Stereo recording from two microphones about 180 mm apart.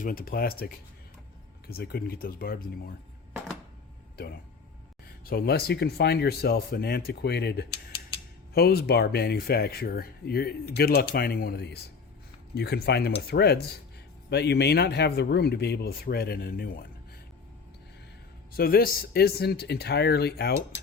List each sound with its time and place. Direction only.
0.0 s speech: 50° left (ahead or behind)
5.0 s speech: 55° left (ahead or behind)
18.5 s speech: 55° left (ahead or behind)